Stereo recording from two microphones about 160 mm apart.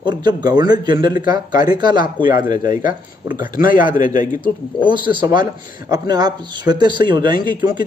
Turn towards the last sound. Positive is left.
turn(degrees=-30)  # may be behind; listen again after turning